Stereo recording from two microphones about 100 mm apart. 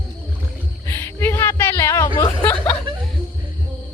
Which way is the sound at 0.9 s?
25° left (ahead or behind).